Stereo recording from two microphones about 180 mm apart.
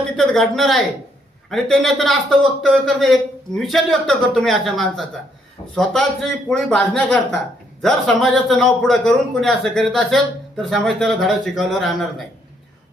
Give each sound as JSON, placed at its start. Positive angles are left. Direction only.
{"t": 0.2, "sound": "speech", "side_deg": 0}